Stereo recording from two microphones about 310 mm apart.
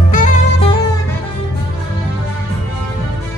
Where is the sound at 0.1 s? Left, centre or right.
Left.